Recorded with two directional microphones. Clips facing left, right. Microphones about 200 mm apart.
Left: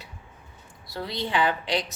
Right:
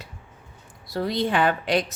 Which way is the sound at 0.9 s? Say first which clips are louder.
Right 5 dB; 45° right (ahead or behind).